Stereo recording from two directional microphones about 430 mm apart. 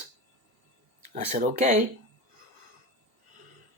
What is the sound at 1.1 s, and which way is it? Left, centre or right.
Speech, centre.